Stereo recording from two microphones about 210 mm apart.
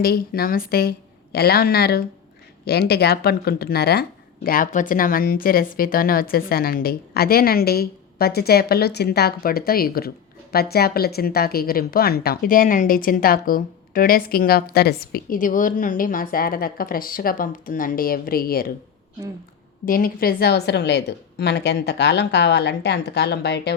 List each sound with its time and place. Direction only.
0.0 s a woman's voice: 45° left (ahead or behind)
19.8 s a woman's voice: 45° left (ahead or behind)